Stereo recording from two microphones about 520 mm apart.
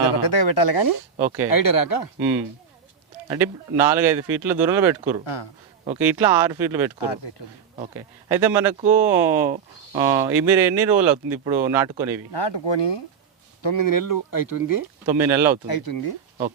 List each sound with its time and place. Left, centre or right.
0.2 s speech: left
1.2 s speech: centre
1.5 s speech: left
3.2 s speech: centre
5.2 s speech: left
5.8 s speech: centre
12.3 s speech: left
15.0 s speech: centre
15.6 s speech: left